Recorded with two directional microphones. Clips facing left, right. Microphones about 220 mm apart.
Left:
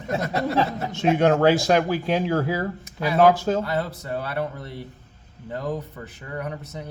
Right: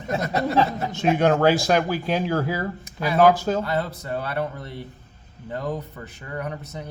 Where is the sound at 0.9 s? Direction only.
25° left (ahead or behind).